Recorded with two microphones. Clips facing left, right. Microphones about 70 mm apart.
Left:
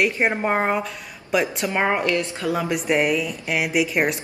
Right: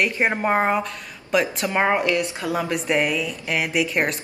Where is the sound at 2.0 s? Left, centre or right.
Centre.